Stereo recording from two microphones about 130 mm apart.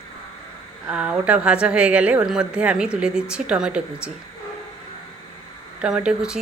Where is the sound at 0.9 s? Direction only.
10° right (ahead or behind).